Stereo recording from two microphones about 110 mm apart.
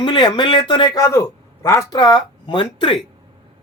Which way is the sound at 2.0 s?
45° left (ahead or behind).